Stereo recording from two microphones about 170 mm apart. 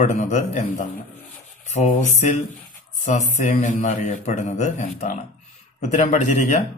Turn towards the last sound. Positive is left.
turn(degrees=45)  # may be behind; listen again after turning